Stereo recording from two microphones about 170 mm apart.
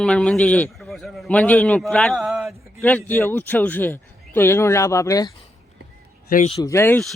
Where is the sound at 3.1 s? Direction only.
10° left (ahead or behind).